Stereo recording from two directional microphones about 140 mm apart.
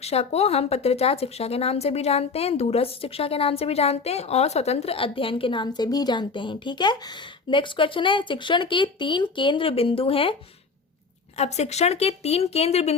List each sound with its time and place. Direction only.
0.0 s speech: 50° left (ahead or behind)
11.3 s speech: 50° left (ahead or behind)